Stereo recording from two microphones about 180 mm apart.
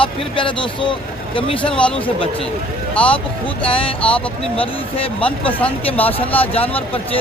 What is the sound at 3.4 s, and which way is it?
Speech, 30° left (ahead or behind).